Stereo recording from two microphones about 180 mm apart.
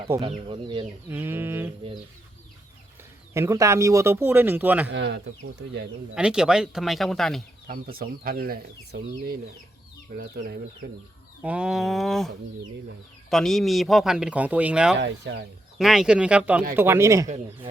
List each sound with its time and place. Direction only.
0.2 s speech: 30° right (ahead or behind)
1.0 s a man's voice: 10° right (ahead or behind)
3.3 s a man's voice: 15° right (ahead or behind)
4.9 s speech: 85° right
6.1 s speech: 5° right (ahead or behind)
7.7 s speech: 55° right (ahead or behind)
11.4 s speech: 5° right (ahead or behind)
13.3 s speech: centre (ahead or behind)
14.9 s speech: 80° right
15.8 s a man's voice: centre (ahead or behind)
17.2 s speech: 40° right (ahead or behind)